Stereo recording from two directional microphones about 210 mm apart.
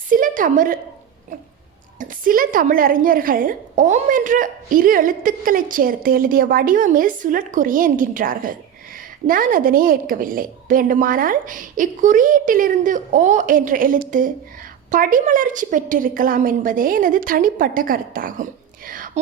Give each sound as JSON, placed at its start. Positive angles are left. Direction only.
{"t": 0.1, "sound": "a woman's voice", "side_deg": -40}
{"t": 2.0, "sound": "a woman's voice", "side_deg": -40}
{"t": 18.9, "sound": "whispering", "side_deg": -40}